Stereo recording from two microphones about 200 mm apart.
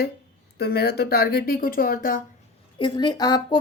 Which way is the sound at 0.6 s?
50° left (ahead or behind).